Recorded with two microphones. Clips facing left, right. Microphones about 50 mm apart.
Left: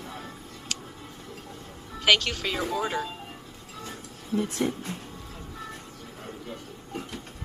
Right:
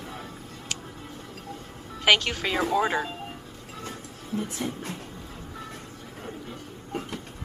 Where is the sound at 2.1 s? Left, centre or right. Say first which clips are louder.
Right 1 dB; centre.